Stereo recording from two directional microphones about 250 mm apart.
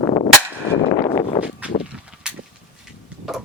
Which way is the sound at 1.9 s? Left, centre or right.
Centre.